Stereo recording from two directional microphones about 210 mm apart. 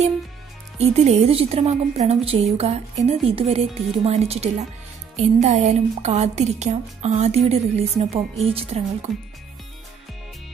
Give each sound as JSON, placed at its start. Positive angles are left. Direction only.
{"t": 0.7, "sound": "a woman's voice", "side_deg": -30}